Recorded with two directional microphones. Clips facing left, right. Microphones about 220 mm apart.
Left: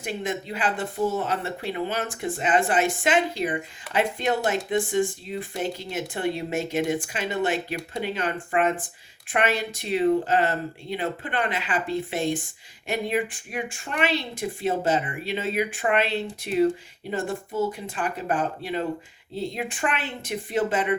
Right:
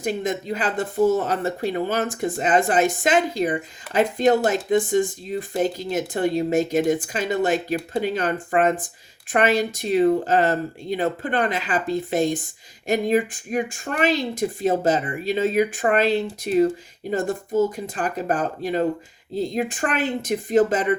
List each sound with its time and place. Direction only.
0.0 s speech: 40° right (ahead or behind)